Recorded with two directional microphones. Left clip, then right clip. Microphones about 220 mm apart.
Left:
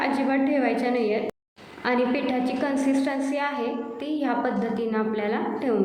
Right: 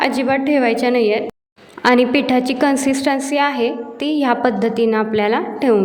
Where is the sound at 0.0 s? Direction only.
45° right (ahead or behind).